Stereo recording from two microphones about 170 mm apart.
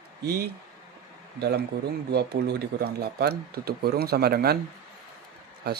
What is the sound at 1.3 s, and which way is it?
Speech, 70° right (ahead or behind).